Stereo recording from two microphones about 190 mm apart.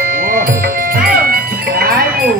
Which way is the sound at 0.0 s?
50° right (ahead or behind).